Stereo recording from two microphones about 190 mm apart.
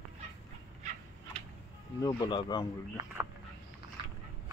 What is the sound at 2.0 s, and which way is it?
Speech, 20° left (ahead or behind).